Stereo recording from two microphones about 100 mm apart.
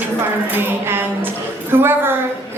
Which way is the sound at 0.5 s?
20° right (ahead or behind).